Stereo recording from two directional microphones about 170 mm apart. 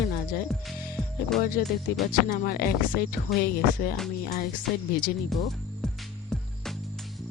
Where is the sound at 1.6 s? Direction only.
60° left (ahead or behind).